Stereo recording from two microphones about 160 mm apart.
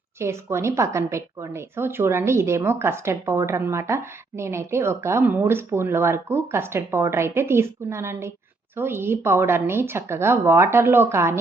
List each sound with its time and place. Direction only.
0.2 s a woman's voice: 15° right (ahead or behind)